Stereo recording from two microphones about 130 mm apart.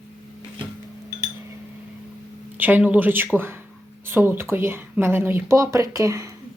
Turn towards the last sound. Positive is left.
turn(degrees=-25)  # may be behind; listen again after turning